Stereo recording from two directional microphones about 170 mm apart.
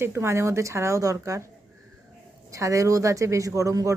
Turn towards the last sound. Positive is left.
turn(degrees=-20)  # may be behind; listen again after turning